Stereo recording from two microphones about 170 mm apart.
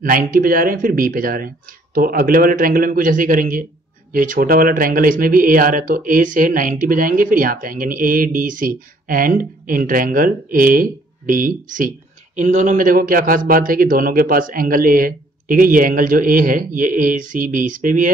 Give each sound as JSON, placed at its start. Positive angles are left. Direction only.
{"t": 0.0, "sound": "a man's voice", "side_deg": -55}